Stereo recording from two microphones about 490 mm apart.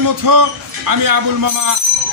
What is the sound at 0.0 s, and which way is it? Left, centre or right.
A man's voice, right.